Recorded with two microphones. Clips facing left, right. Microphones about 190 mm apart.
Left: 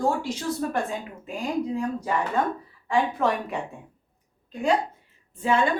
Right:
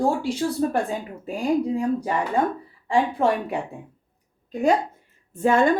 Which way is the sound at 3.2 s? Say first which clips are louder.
Right 4 dB; 30° right (ahead or behind).